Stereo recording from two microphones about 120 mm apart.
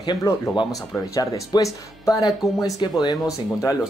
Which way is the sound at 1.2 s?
30° left (ahead or behind).